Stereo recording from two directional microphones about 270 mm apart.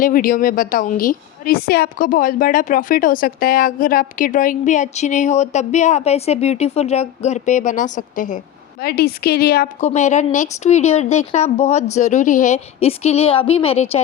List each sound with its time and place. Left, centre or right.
0.0 s a woman's voice: left